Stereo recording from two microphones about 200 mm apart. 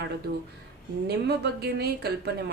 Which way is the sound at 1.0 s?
55° right (ahead or behind).